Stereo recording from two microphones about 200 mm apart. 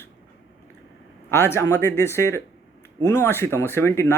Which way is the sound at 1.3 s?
15° left (ahead or behind).